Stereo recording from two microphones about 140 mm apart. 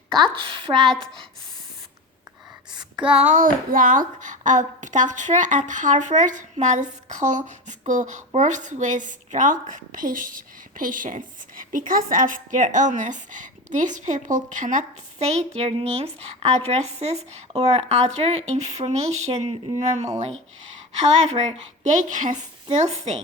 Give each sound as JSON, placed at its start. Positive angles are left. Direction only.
{"t": 0.4, "sound": "a woman's voice", "side_deg": -40}
{"t": 0.8, "sound": "a woman's voice", "side_deg": 0}
{"t": 3.2, "sound": "speech", "side_deg": -60}
{"t": 19.9, "sound": "speech", "side_deg": -55}